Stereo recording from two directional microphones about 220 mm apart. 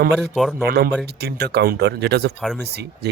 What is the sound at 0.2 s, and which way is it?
Speech, centre (ahead or behind).